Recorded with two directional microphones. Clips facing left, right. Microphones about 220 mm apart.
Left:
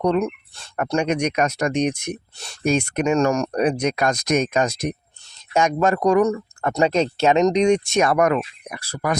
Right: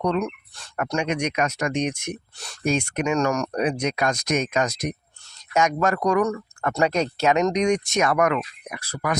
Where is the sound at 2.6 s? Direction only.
35° left (ahead or behind).